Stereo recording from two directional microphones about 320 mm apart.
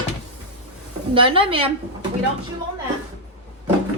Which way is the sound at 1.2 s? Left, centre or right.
Centre.